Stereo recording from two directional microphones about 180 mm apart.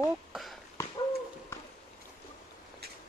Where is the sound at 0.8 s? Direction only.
15° left (ahead or behind).